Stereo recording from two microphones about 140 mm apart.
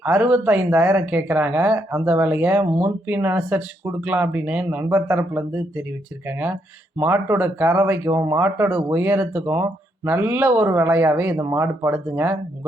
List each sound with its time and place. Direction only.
0.0 s speech: 10° right (ahead or behind)
7.0 s speech: 15° right (ahead or behind)